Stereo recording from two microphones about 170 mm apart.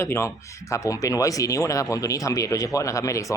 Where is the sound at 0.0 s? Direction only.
15° left (ahead or behind).